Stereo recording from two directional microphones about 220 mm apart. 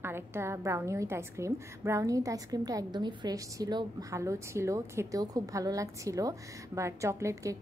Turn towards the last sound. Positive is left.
turn(degrees=-15)  # may be behind; listen again after turning